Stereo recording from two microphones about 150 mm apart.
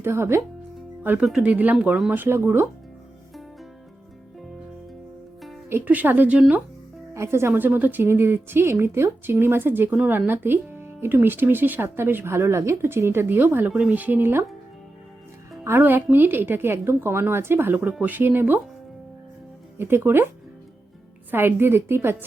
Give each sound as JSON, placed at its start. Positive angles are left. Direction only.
{"t": 0.0, "sound": "a woman's voice", "side_deg": -15}
{"t": 5.6, "sound": "a woman's voice", "side_deg": -15}
{"t": 15.6, "sound": "a woman's voice", "side_deg": -15}
{"t": 19.8, "sound": "a woman's voice", "side_deg": -15}
{"t": 21.2, "sound": "a woman's voice", "side_deg": -15}